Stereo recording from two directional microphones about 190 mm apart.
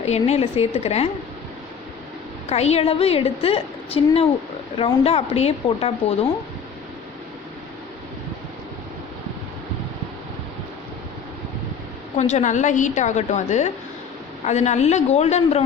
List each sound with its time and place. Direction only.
0.0 s a woman's voice: 35° left (ahead or behind)
2.5 s a woman's voice: 35° left (ahead or behind)
12.1 s a woman's voice: 35° left (ahead or behind)